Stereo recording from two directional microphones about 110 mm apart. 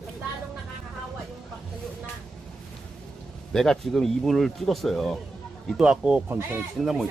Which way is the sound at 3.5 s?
5° left (ahead or behind).